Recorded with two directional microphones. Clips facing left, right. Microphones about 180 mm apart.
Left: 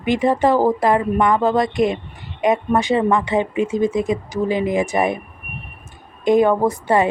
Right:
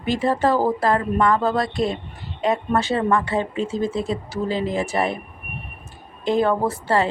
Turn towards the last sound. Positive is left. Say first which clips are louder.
# left 4 dB
turn(degrees=15)  # may be behind; listen again after turning